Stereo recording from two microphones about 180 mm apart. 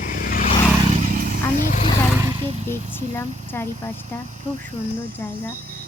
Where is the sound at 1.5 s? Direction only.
50° left (ahead or behind).